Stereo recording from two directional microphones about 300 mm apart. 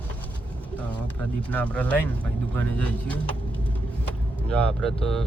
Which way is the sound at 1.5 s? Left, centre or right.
Centre.